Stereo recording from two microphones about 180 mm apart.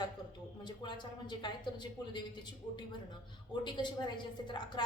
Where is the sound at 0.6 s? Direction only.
25° left (ahead or behind).